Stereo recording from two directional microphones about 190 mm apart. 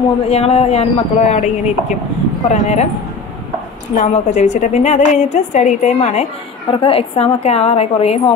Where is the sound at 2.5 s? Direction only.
35° left (ahead or behind).